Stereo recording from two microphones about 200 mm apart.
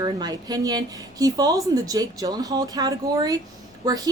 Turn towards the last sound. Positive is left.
turn(degrees=-20)  # may be behind; listen again after turning